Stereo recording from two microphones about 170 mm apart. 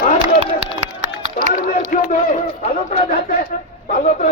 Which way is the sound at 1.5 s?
50° left (ahead or behind).